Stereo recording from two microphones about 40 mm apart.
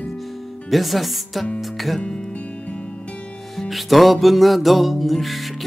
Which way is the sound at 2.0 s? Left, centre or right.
Left.